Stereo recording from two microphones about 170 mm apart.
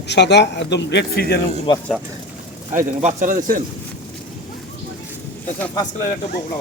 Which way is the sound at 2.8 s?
50° right (ahead or behind).